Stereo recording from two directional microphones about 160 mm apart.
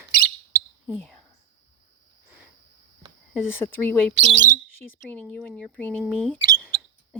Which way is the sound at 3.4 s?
15° left (ahead or behind).